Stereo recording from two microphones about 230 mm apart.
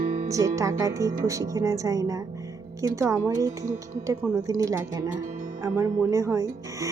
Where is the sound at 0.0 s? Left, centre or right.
Right.